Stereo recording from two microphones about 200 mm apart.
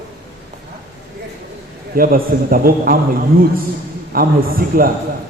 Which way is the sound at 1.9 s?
45° right (ahead or behind).